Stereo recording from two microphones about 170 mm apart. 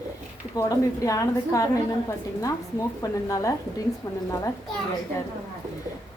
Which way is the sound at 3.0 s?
20° left (ahead or behind).